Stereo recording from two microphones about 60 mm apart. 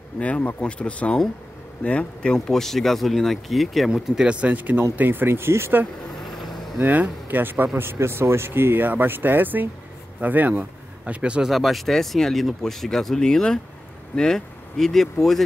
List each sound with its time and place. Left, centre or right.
0.2 s speech: left
2.3 s a man's voice: centre; by 5.8 s right
6.8 s a man's voice: right
11.4 s speech: centre